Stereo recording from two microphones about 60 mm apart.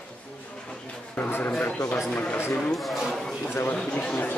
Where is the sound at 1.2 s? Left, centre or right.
Left.